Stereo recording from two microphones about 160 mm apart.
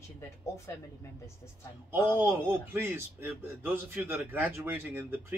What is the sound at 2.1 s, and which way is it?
A man's voice, 15° right (ahead or behind).